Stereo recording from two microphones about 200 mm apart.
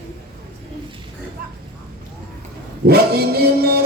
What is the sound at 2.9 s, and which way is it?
Music, 50° right (ahead or behind).